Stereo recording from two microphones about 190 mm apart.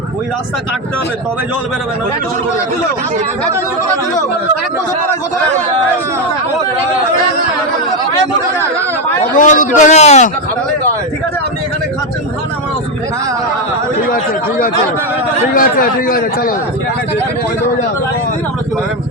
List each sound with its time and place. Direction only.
9.3 s speech: 45° left (ahead or behind)
15.5 s a man's voice: 50° left (ahead or behind)